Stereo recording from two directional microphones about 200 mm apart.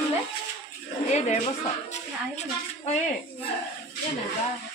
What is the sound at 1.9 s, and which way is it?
Speech, 35° left (ahead or behind).